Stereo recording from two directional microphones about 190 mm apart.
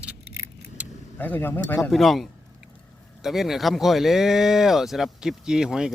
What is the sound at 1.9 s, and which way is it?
Speech, centre (ahead or behind).